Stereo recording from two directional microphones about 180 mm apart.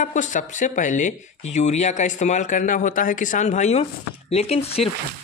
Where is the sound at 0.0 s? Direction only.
45° left (ahead or behind).